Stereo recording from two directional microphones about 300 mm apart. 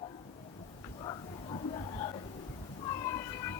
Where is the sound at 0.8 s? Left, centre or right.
Centre.